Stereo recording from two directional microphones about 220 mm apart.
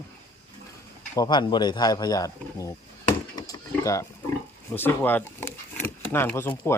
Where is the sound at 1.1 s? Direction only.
15° left (ahead or behind).